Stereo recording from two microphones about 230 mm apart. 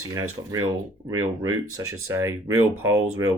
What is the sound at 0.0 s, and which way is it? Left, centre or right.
Speech, right.